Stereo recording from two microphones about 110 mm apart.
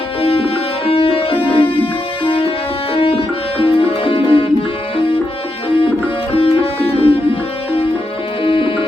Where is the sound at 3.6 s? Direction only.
55° left (ahead or behind).